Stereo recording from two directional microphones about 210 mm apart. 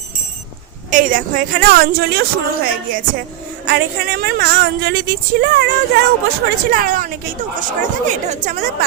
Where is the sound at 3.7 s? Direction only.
50° right (ahead or behind).